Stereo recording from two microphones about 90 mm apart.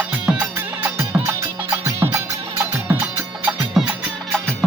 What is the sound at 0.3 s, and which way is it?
Music, 25° right (ahead or behind).